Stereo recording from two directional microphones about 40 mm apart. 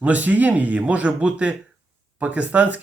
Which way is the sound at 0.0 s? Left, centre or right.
Right.